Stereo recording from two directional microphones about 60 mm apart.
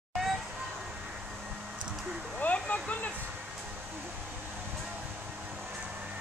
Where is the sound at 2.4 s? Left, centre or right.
Left.